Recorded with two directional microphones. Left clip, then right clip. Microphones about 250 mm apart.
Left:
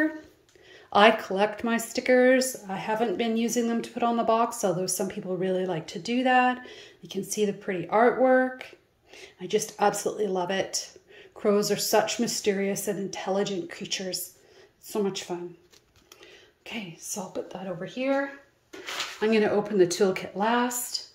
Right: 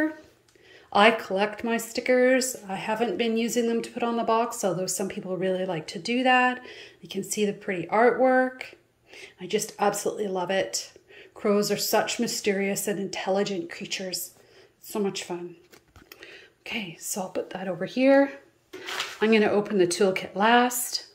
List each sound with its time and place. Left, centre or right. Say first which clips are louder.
0.8 s speech: even; centre
16.2 s a sound: right 5 dB; centre
17.1 s speech: right 3 dB; centre
17.7 s speech: right 8 dB; right
19.1 s speech: right 2 dB; centre